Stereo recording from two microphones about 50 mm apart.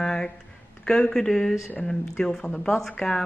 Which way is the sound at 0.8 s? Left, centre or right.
Centre.